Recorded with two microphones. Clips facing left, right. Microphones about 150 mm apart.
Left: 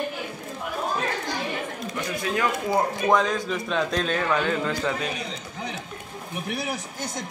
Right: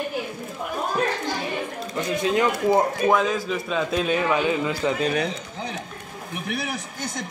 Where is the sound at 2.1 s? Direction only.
20° right (ahead or behind).